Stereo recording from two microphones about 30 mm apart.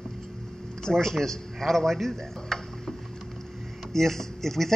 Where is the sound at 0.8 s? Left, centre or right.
Centre.